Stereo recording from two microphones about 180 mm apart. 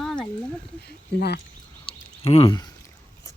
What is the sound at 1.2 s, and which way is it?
Speech, 60° left (ahead or behind).